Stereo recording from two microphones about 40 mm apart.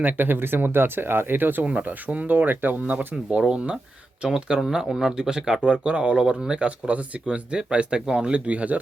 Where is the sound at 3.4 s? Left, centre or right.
Right.